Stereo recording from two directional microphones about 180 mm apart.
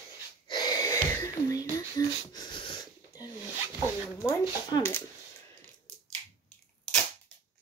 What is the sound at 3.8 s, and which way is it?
Speech, 20° left (ahead or behind).